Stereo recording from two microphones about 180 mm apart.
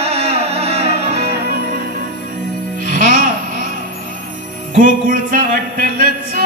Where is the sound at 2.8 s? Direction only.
50° right (ahead or behind).